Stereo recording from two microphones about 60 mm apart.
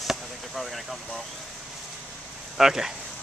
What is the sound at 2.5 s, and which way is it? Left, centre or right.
Speech, centre.